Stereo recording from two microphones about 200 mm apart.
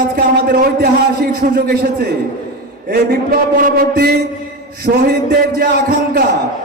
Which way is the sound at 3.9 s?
50° right (ahead or behind).